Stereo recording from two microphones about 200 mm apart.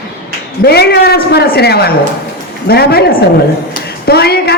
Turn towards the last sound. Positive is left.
turn(degrees=50)  # may be behind; listen again after turning